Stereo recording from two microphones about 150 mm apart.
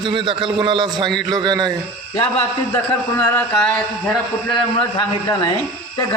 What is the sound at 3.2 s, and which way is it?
Speech, 10° left (ahead or behind).